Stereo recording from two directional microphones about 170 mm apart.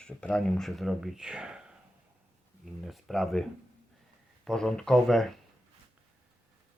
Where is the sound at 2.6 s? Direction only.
Centre (ahead or behind).